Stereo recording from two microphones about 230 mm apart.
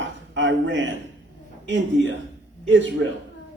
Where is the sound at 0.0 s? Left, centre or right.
Right.